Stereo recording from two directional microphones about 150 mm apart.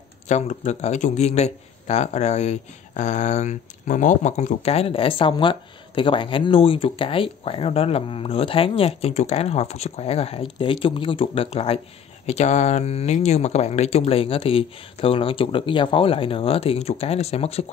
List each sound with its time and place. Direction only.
0.3 s a man's voice: 50° left (ahead or behind)
12.3 s speech: 50° left (ahead or behind)